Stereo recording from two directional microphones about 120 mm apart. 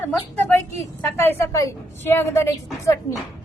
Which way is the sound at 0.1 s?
15° left (ahead or behind).